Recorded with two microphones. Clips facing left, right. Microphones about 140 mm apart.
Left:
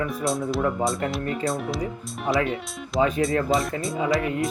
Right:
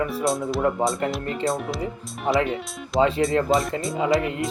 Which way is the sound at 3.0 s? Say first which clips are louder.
Right 2 dB; 50° right (ahead or behind).